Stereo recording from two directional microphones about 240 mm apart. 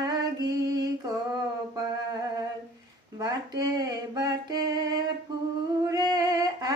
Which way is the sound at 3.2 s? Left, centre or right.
Centre.